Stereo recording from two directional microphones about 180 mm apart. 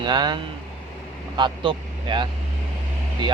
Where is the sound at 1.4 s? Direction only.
25° right (ahead or behind).